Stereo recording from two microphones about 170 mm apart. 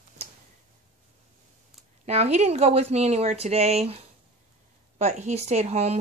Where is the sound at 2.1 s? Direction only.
40° right (ahead or behind).